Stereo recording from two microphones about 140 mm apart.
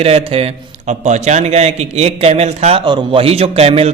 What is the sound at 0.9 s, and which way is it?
A man's voice, 60° right (ahead or behind).